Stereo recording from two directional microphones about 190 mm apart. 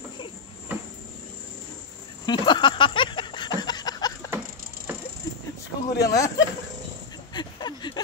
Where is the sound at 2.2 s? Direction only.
25° left (ahead or behind).